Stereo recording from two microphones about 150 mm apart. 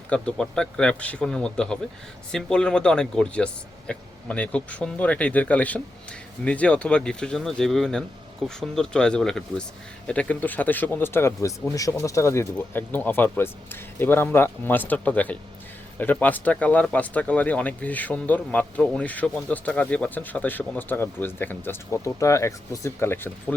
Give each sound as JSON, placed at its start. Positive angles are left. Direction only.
{"t": 0.1, "sound": "speech", "side_deg": 5}